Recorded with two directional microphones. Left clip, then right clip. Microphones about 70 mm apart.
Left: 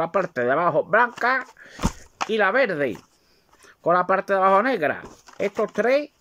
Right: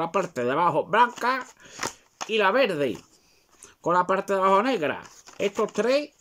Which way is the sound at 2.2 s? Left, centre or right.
Right.